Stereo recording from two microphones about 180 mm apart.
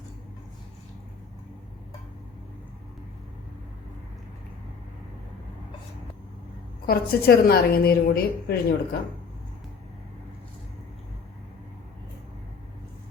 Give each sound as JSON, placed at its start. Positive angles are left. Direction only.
{"t": 6.8, "sound": "a woman's voice", "side_deg": 60}